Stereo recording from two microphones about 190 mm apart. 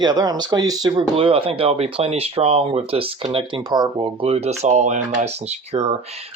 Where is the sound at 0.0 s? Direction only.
20° right (ahead or behind).